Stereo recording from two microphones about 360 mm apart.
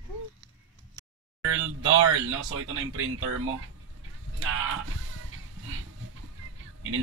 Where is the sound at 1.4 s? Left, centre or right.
Right.